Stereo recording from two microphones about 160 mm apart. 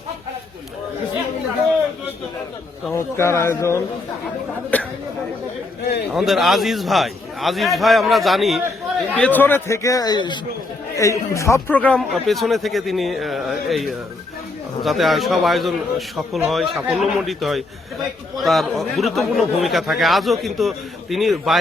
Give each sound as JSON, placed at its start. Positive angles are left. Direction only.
{"t": 2.9, "sound": "speech", "side_deg": 15}
{"t": 6.1, "sound": "a man's voice", "side_deg": 0}